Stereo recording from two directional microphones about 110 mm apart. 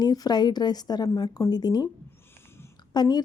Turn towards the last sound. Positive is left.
turn(degrees=40)  # may be behind; listen again after turning